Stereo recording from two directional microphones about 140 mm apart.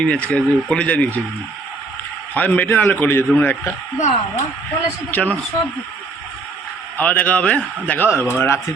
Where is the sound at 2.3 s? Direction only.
10° left (ahead or behind).